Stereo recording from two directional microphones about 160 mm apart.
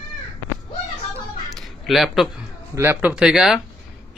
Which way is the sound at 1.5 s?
Centre (ahead or behind).